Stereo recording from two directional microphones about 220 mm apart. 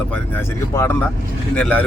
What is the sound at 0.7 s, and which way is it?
Speech, 10° left (ahead or behind).